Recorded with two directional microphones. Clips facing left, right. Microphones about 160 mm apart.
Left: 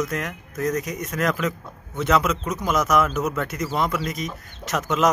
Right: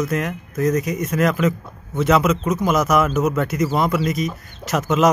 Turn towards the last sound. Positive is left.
turn(degrees=-5)  # may be behind; listen again after turning